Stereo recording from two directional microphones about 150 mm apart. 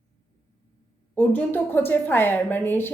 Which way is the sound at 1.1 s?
10° left (ahead or behind).